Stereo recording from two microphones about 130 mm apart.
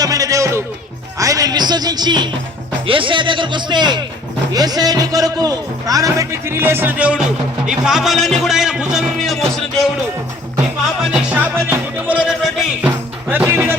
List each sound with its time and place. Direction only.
0.0 s music: 25° right (ahead or behind)
1.2 s a man's voice: 25° right (ahead or behind); by 9.9 s centre (ahead or behind)
11.1 s music: 10° right (ahead or behind)